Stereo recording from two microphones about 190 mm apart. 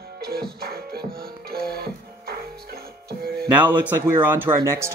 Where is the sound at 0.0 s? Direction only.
55° right (ahead or behind).